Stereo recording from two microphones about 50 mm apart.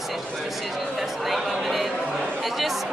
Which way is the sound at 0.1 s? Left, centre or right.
Centre.